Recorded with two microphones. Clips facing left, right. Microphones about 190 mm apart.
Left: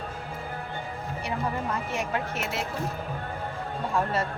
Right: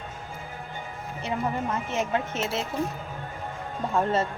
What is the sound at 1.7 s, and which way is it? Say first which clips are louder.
Speech: right 2 dB; 25° right (ahead or behind).